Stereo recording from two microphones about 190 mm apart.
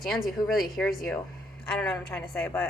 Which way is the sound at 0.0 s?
Centre (ahead or behind).